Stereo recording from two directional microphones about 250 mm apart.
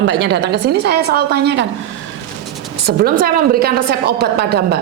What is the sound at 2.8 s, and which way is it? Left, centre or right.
A woman's voice, right.